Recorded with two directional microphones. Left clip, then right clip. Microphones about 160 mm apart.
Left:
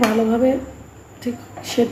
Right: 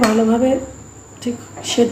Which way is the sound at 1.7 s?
10° right (ahead or behind).